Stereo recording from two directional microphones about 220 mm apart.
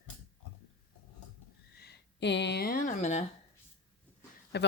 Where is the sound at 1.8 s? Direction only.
50° left (ahead or behind); by 3.2 s 30° left (ahead or behind).